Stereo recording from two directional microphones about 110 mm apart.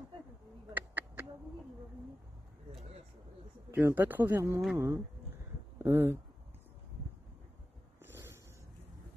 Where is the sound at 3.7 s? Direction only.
15° right (ahead or behind).